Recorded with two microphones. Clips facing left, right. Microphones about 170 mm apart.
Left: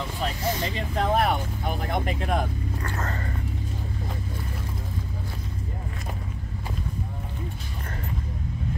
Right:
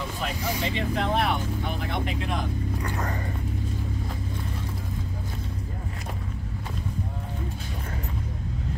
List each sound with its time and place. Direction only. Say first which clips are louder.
0.7 s speech: left 2 dB; 40° left (ahead or behind)
2.8 s speech: right 1 dB; 15° right (ahead or behind)